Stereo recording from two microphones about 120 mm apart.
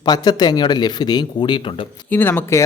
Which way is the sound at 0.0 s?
35° left (ahead or behind).